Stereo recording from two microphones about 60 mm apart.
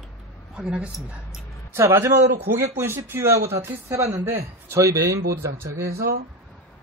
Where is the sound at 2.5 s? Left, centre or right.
Right.